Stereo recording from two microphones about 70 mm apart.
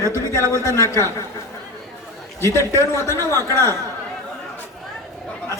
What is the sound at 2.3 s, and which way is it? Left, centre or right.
A man's voice, left.